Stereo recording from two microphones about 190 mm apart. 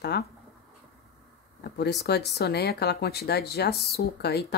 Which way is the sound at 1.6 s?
60° left (ahead or behind).